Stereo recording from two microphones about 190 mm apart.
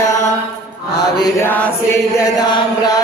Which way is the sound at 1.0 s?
20° left (ahead or behind).